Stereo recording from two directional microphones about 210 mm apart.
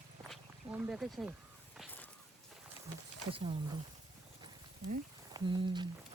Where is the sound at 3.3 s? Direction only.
25° right (ahead or behind).